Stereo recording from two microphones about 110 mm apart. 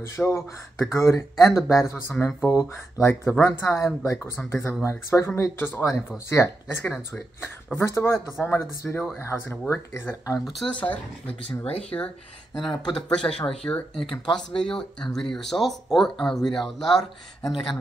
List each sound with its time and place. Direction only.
0.0 s speech: 20° left (ahead or behind)
10.4 s speech: centre (ahead or behind)
10.7 s speech: 15° left (ahead or behind)
12.5 s speech: 40° left (ahead or behind)
13.1 s speech: 5° left (ahead or behind)